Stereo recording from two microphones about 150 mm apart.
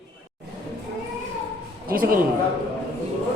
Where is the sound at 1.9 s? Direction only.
75° right (ahead or behind).